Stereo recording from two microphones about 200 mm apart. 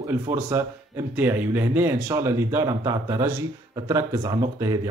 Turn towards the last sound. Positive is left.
turn(degrees=-15)  # may be behind; listen again after turning